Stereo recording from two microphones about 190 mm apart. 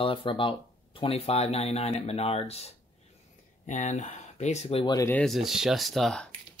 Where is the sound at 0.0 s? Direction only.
25° left (ahead or behind).